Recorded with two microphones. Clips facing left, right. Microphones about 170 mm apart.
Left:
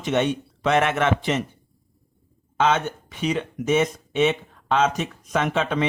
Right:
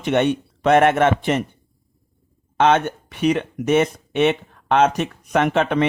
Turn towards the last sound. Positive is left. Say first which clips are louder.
# right 5 dB
turn(degrees=-60)  # may be behind; listen again after turning